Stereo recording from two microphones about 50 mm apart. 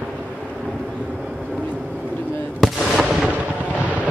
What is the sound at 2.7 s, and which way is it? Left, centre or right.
Fireworks, centre.